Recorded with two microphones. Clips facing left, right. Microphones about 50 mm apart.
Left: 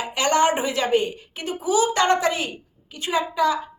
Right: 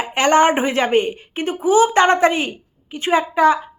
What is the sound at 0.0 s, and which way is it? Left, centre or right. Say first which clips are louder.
A woman's voice: right 5 dB; right.